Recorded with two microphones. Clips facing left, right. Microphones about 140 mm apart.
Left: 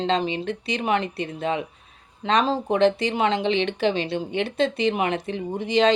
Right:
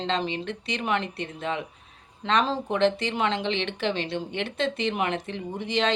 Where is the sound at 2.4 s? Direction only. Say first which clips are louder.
Left 4 dB; 15° left (ahead or behind).